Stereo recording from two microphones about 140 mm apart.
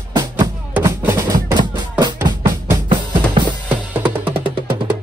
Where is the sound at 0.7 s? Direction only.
15° right (ahead or behind); by 2.1 s 30° right (ahead or behind).